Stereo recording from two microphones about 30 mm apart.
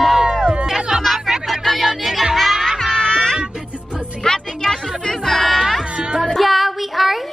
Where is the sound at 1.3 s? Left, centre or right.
Centre.